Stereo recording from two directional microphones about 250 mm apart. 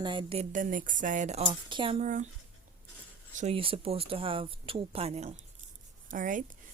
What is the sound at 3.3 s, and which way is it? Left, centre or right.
A woman's voice, right.